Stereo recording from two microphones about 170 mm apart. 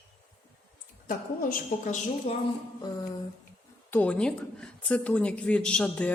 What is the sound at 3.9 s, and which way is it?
Speech, 10° left (ahead or behind).